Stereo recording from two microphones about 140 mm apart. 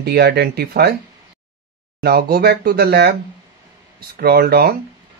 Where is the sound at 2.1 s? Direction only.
90° right.